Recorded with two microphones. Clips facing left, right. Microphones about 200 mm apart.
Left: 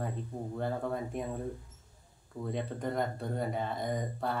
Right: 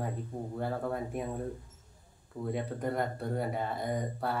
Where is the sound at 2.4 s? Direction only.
5° right (ahead or behind).